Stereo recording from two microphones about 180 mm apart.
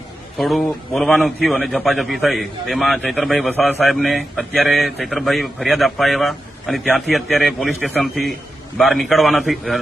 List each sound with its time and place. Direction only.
0.3 s a man's voice: centre (ahead or behind)